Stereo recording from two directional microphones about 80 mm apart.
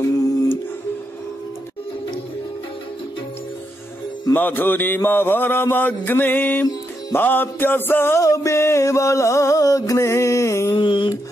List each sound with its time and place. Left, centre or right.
4.3 s mantra: left
8.2 s music: left
10.8 s a sound: left